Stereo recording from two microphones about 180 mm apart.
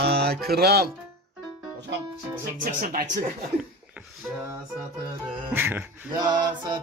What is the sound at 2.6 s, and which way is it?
Speech, 55° right (ahead or behind).